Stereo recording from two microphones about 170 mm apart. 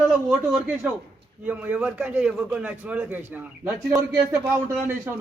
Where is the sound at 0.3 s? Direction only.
10° right (ahead or behind).